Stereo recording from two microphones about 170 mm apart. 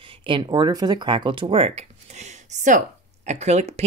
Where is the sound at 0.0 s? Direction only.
30° right (ahead or behind).